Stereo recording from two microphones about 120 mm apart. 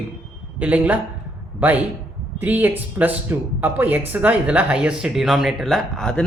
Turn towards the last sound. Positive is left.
turn(degrees=5)  # may be behind; listen again after turning